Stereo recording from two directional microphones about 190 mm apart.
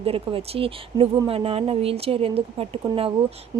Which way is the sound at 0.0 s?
30° right (ahead or behind).